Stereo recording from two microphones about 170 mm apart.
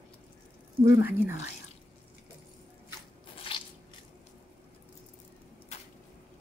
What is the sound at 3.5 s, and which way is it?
Biting, 30° left (ahead or behind).